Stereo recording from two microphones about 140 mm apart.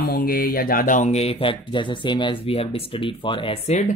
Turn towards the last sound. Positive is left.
turn(degrees=40)  # may be behind; listen again after turning